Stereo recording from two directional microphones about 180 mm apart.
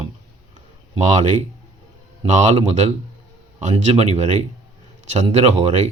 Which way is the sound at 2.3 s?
40° right (ahead or behind).